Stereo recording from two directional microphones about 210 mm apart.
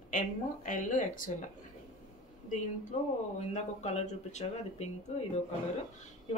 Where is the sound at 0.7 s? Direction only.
40° left (ahead or behind).